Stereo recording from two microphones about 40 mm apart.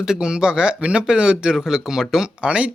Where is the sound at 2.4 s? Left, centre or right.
Right.